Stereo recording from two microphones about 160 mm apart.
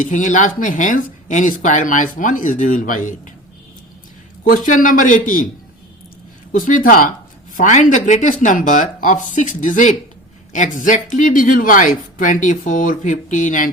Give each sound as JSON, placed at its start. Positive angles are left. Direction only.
{"t": 0.0, "sound": "speech", "side_deg": 50}
{"t": 4.4, "sound": "speech", "side_deg": 55}
{"t": 6.5, "sound": "speech", "side_deg": 55}